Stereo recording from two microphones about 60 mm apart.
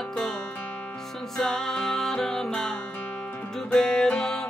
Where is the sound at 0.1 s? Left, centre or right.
Centre.